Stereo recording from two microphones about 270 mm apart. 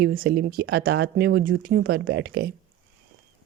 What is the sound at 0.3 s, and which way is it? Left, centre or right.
Speech, right.